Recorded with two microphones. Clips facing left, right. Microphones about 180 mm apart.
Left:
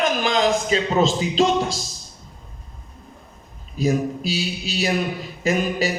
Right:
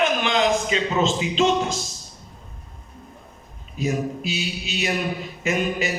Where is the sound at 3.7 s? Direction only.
35° left (ahead or behind).